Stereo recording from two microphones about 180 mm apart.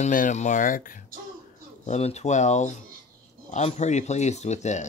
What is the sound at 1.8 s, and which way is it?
Speech, 35° left (ahead or behind).